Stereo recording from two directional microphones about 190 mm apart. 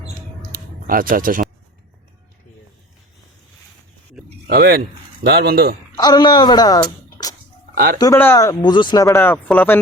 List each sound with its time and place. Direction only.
0.4 s a sound: 50° right (ahead or behind)
4.4 s speech: 55° right (ahead or behind)
6.0 s a woman's voice: 20° left (ahead or behind)
9.0 s speech: 10° left (ahead or behind)